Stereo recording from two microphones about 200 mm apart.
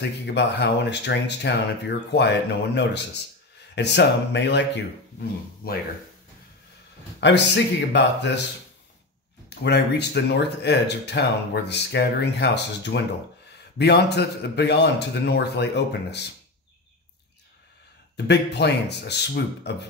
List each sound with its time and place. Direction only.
0.0 s speech: 60° left (ahead or behind)
5.6 s speech: 50° left (ahead or behind)
7.2 s speech: 60° left (ahead or behind)
9.6 s speech: 55° left (ahead or behind)
18.1 s speech: 55° left (ahead or behind)